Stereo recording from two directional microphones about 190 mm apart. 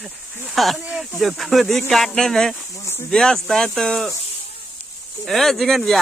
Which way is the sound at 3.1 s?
Centre (ahead or behind).